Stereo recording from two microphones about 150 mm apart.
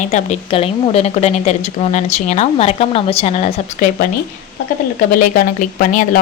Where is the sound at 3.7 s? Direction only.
65° left (ahead or behind).